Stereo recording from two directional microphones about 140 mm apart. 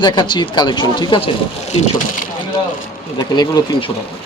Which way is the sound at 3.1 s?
30° left (ahead or behind).